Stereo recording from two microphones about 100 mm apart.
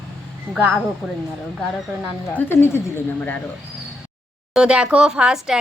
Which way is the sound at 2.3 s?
20° left (ahead or behind).